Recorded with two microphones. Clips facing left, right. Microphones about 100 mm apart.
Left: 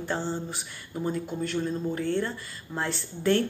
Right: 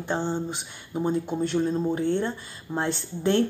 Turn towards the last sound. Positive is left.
turn(degrees=-25)  # may be behind; listen again after turning